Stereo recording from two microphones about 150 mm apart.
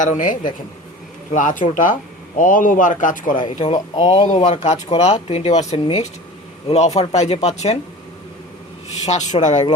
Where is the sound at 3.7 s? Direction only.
30° left (ahead or behind).